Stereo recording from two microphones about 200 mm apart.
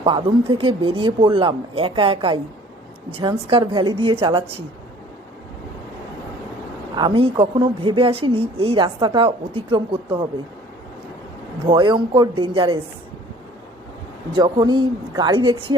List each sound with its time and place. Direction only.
0.0 s a woman's voice: 25° right (ahead or behind)
6.9 s a woman's voice: 25° right (ahead or behind)
11.7 s a woman's voice: 25° right (ahead or behind)
14.3 s a woman's voice: 20° right (ahead or behind)